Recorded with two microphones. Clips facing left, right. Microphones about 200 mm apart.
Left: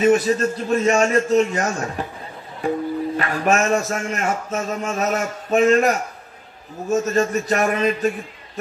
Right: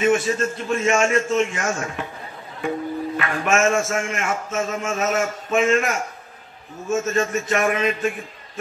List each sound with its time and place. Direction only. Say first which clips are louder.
0.0 s music: left 3 dB; 40° left (ahead or behind)
3.2 s music: left 1 dB; 35° left (ahead or behind)